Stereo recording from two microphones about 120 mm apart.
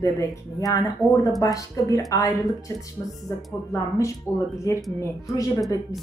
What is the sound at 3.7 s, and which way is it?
Speech, 25° left (ahead or behind).